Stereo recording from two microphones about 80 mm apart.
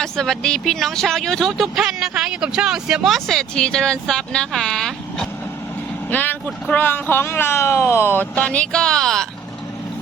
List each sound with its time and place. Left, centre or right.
0.0 s speech: centre
6.1 s speech: left
8.4 s speech: centre